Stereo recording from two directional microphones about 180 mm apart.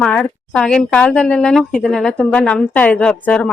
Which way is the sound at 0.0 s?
5° left (ahead or behind).